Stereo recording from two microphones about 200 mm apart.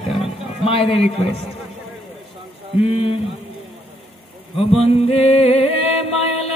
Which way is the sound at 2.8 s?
30° left (ahead or behind).